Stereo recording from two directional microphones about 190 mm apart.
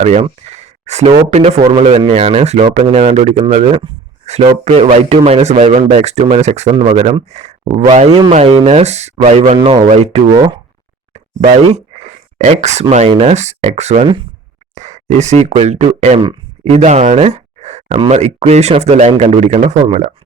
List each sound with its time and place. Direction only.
0.0 s speech: 35° right (ahead or behind)
0.5 s a sound: 35° right (ahead or behind)
1.3 s speech: 30° right (ahead or behind)
9.6 s speech: 25° right (ahead or behind)
11.1 s a sound: 35° right (ahead or behind)
12.9 s speech: 35° right (ahead or behind)